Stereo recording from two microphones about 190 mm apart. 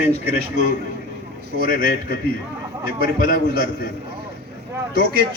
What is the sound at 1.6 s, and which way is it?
Speech, 50° left (ahead or behind).